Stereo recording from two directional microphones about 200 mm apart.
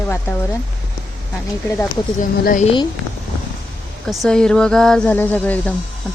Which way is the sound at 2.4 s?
45° left (ahead or behind).